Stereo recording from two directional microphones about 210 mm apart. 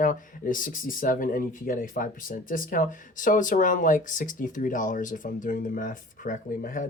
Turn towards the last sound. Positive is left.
turn(degrees=40)  # may be behind; listen again after turning